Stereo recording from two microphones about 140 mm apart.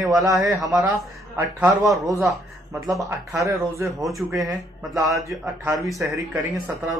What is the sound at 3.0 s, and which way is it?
Speech, 25° right (ahead or behind).